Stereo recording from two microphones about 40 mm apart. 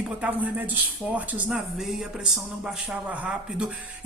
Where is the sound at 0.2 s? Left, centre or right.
Right.